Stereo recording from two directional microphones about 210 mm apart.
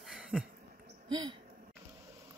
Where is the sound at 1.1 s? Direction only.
20° right (ahead or behind).